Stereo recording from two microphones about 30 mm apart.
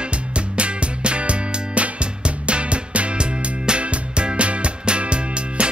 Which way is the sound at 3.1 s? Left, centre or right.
Right.